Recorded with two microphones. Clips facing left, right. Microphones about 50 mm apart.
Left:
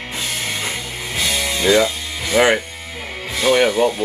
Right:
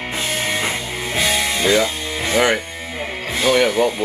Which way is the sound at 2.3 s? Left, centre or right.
Centre.